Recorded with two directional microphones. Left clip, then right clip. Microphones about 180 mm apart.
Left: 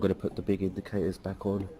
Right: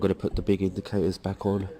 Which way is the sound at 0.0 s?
30° right (ahead or behind).